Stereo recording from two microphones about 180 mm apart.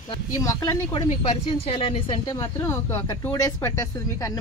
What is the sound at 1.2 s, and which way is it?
Speech, 30° left (ahead or behind).